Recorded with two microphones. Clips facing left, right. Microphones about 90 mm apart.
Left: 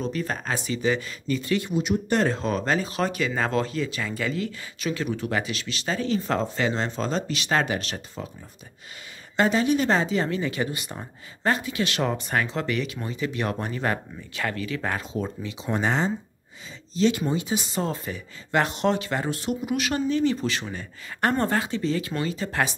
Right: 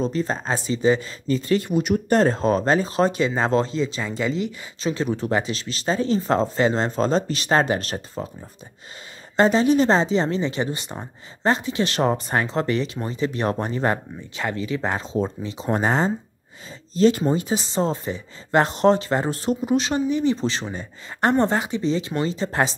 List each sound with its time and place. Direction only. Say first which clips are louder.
0.0 s speech: right 5 dB; 30° right (ahead or behind)
1.7 s speech: right 4 dB; 50° right (ahead or behind)
2.1 s speech: right 6 dB; 35° right (ahead or behind)
9.4 s speech: right 5 dB; 30° right (ahead or behind)
20.0 s speech: right 2 dB; 15° right (ahead or behind)